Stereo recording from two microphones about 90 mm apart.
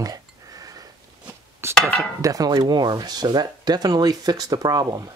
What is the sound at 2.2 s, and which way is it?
Speech, 45° right (ahead or behind).